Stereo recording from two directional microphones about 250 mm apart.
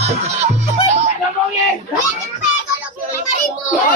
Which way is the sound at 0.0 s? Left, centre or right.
Right.